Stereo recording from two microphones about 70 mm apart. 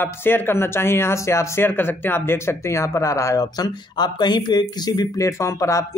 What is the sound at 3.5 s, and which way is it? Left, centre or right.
Speech, left.